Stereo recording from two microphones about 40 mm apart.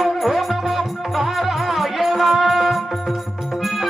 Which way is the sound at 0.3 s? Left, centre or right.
Centre.